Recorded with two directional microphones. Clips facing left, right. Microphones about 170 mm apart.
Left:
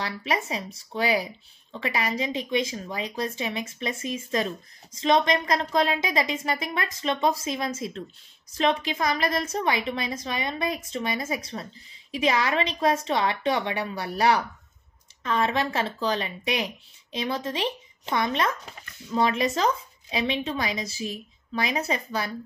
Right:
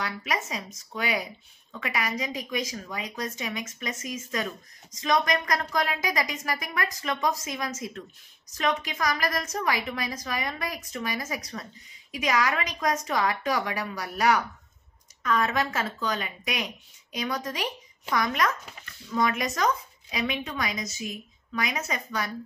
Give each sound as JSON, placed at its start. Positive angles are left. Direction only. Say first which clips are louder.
{"t": 0.0, "sound": "speech", "louder": "left 3 dB", "side_deg": 30}